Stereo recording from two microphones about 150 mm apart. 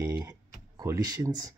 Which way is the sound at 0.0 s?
25° right (ahead or behind).